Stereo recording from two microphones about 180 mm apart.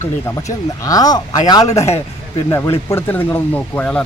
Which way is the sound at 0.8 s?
20° left (ahead or behind).